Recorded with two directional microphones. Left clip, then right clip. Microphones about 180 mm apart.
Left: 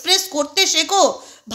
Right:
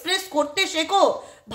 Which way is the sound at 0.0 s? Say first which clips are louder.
Left 5 dB; 40° left (ahead or behind).